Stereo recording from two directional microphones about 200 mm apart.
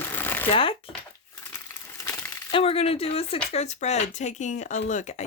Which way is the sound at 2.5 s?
30° left (ahead or behind).